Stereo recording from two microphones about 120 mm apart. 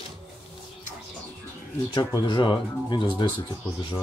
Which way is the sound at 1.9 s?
40° left (ahead or behind).